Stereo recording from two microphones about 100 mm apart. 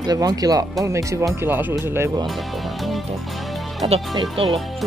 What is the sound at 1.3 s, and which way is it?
Speech, 20° right (ahead or behind).